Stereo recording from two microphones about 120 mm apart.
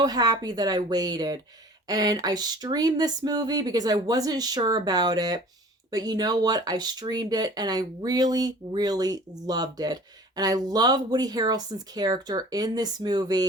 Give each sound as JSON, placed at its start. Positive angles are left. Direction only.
{"t": 0.0, "sound": "speech", "side_deg": -30}